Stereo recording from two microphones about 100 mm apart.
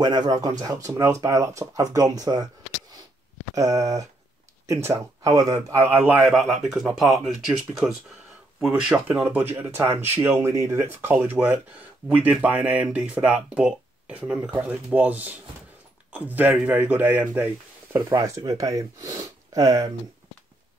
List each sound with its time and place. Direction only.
0.0 s speech: 45° right (ahead or behind)
3.5 s speech: 35° right (ahead or behind)
6.3 s speech: centre (ahead or behind)
9.3 s speech: 20° right (ahead or behind)
17.9 s speech: 35° right (ahead or behind)